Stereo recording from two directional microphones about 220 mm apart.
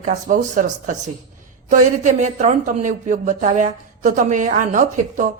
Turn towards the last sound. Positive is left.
turn(degrees=-35)  # may be behind; listen again after turning